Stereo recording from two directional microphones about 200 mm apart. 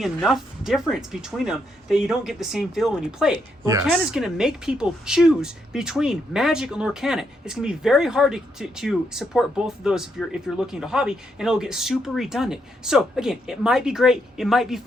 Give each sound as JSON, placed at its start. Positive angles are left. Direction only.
{"t": 0.2, "sound": "speech", "side_deg": 0}
{"t": 3.7, "sound": "speech", "side_deg": -15}
{"t": 3.9, "sound": "speech", "side_deg": 0}